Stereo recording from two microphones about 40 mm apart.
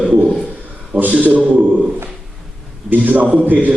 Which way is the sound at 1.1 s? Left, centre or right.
Right.